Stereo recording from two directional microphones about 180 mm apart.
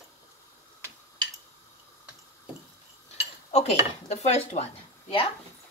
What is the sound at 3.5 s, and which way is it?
Speech, 35° left (ahead or behind).